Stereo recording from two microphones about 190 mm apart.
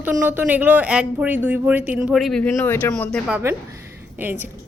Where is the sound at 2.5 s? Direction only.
10° left (ahead or behind); by 4.3 s 10° right (ahead or behind).